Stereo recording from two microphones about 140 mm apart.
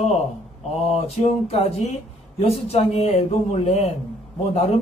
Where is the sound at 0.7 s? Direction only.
45° left (ahead or behind).